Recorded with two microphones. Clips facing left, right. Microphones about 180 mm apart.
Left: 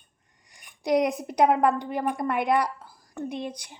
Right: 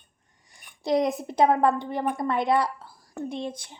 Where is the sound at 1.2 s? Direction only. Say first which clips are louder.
Even; 15° left (ahead or behind).